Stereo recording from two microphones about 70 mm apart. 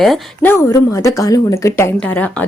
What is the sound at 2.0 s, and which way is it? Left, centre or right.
Speech, left.